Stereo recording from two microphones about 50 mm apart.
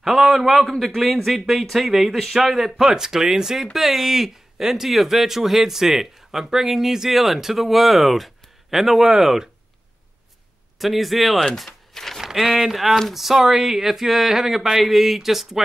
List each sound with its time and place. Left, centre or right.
0.0 s speech: centre
10.8 s speech: centre
11.5 s a sound: centre
12.2 s speech: centre